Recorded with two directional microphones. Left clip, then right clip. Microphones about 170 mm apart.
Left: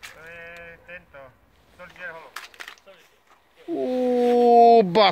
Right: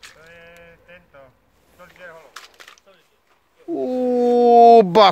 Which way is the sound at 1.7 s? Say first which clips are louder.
Left 3 dB; 60° right (ahead or behind).